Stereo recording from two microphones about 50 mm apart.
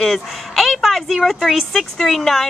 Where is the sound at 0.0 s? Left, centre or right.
Centre.